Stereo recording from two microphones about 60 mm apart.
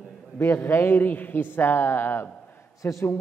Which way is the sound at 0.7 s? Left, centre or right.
Left.